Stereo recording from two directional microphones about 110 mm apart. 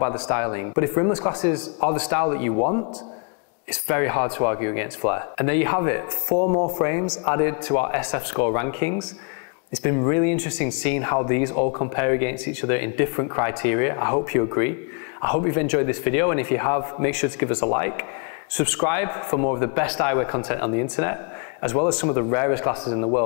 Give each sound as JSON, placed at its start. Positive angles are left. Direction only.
{"t": 0.0, "sound": "speech", "side_deg": 25}
{"t": 3.7, "sound": "speech", "side_deg": 25}